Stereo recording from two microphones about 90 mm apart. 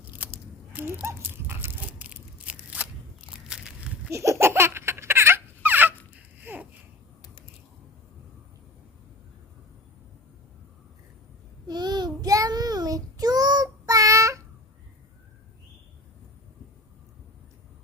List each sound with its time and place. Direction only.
0.7 s speech: 20° right (ahead or behind)
1.0 s crunch: 25° right (ahead or behind); by 4.1 s 10° right (ahead or behind)
4.1 s baby laughter: 30° right (ahead or behind)
6.1 s a sound: 20° right (ahead or behind)
11.7 s child singing: 50° right (ahead or behind); by 14.4 s 35° right (ahead or behind)